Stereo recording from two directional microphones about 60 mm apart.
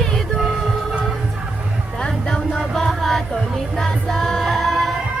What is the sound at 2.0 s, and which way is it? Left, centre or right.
Music, centre.